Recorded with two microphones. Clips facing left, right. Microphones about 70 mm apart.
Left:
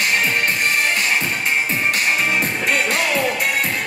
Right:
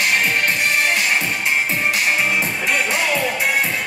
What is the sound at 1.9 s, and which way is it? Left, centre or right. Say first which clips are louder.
Music: even; left.